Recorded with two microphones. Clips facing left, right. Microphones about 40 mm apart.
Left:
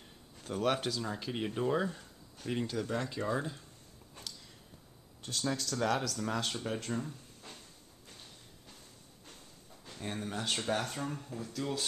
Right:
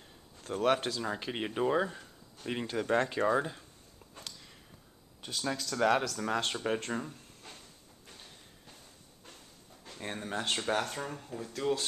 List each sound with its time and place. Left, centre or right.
0.4 s speech: centre
1.0 s speech: right
2.9 s speech: right
3.3 s speech: right
5.4 s speech: right
9.9 s speech: centre